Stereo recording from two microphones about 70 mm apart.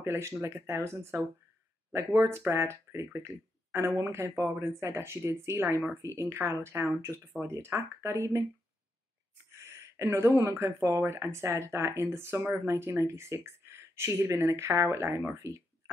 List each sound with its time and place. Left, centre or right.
0.0 s speech: right
9.5 s a sound: right
10.3 s speech: right